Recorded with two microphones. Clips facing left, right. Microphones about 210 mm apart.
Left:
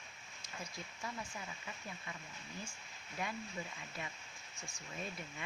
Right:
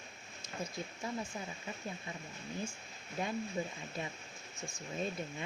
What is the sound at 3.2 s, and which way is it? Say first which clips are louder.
Speech: right 6 dB; 30° right (ahead or behind).